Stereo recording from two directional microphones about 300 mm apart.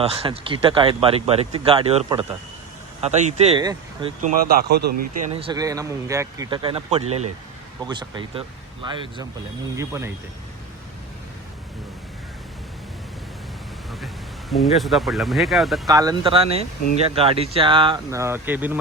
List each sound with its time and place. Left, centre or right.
0.0 s speech: centre
4.2 s speech: right
5.3 s speech: centre
14.5 s speech: centre
15.9 s speech: centre